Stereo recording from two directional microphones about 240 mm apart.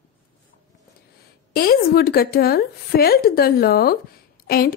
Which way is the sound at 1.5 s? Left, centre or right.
Left.